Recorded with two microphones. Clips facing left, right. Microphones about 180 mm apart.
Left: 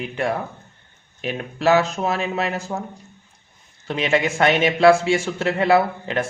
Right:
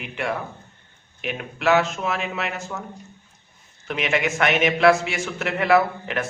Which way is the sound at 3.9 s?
30° left (ahead or behind).